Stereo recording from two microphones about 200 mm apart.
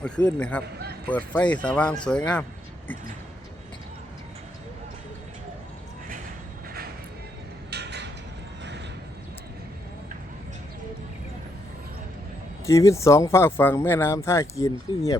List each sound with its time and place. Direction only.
0.3 s speech: 5° left (ahead or behind)
7.7 s a sound: 55° right (ahead or behind)
12.6 s speech: 15° left (ahead or behind)